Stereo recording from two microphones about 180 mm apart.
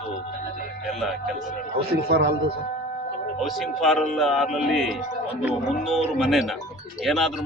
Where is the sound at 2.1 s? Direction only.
65° right (ahead or behind).